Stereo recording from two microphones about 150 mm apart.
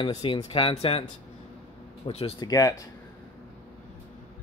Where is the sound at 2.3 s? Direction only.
25° left (ahead or behind).